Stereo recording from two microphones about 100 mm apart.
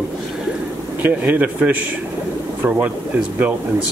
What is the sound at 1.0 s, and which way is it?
A man's voice, 15° right (ahead or behind).